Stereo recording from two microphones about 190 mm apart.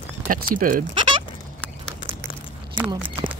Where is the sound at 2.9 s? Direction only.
25° right (ahead or behind).